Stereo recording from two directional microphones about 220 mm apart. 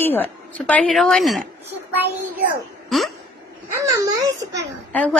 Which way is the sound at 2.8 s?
Centre (ahead or behind).